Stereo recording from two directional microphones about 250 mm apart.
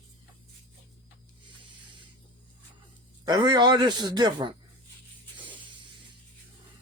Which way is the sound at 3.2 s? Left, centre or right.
Centre.